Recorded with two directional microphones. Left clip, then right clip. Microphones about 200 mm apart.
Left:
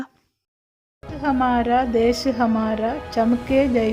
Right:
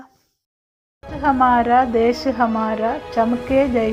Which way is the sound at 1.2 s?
5° left (ahead or behind).